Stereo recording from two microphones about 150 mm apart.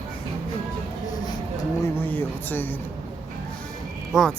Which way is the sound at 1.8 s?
15° left (ahead or behind).